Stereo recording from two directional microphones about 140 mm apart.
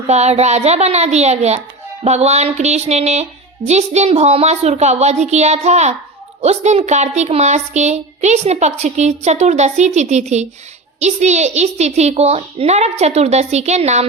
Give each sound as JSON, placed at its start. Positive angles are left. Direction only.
{"t": 0.1, "sound": "a child's voice", "side_deg": -50}